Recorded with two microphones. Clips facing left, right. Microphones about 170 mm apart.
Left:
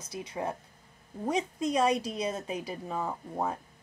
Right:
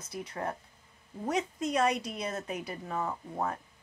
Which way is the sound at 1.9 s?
30° left (ahead or behind).